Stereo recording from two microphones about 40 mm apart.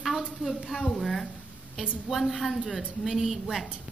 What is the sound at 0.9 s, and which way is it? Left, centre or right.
A woman's voice, centre.